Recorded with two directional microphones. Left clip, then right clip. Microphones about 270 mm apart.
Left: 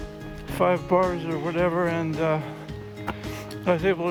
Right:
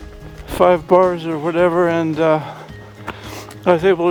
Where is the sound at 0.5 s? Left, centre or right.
Right.